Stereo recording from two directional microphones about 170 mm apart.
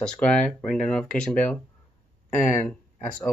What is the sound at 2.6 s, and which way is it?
Speech, 5° left (ahead or behind).